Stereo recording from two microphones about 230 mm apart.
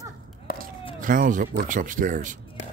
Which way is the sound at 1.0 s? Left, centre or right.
Right.